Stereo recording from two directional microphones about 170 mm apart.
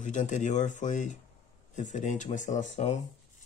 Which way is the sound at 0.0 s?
45° left (ahead or behind).